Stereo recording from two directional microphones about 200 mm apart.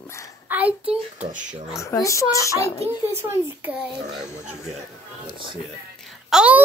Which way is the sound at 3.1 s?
10° right (ahead or behind).